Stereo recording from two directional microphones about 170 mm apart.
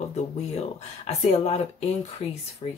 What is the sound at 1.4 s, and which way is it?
Speech, 40° left (ahead or behind).